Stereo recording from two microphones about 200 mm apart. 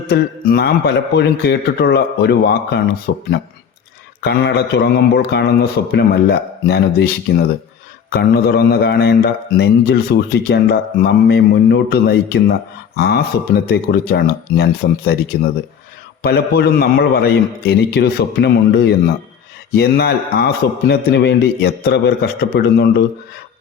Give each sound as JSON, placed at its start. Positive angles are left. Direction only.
{"t": 0.1, "sound": "a man's voice", "side_deg": 55}
{"t": 16.2, "sound": "a man's voice", "side_deg": 55}